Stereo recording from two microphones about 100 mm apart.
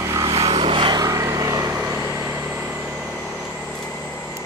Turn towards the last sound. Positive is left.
turn(degrees=5)  # may be behind; listen again after turning